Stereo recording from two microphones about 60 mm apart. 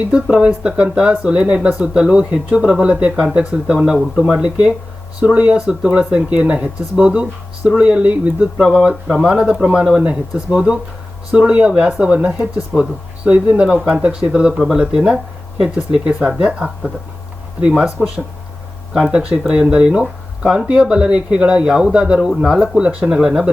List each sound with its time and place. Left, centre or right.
0.1 s speech: centre
3.8 s speech: centre
4.3 s speech: centre
5.5 s speech: centre
8.7 s speech: centre